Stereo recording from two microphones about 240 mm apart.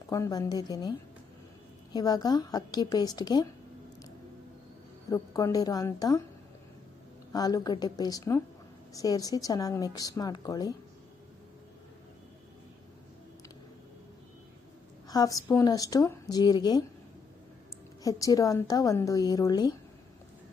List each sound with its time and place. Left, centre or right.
0.1 s a woman's voice: centre
5.1 s a woman's voice: centre
7.3 s a woman's voice: centre
15.0 s a woman's voice: centre
18.0 s a woman's voice: centre